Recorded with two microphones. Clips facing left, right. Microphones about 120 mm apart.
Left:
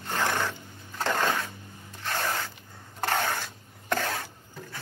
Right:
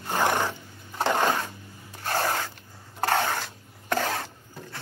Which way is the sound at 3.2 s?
15° right (ahead or behind).